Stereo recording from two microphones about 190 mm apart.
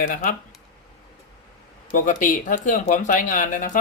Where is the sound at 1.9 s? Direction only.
45° left (ahead or behind).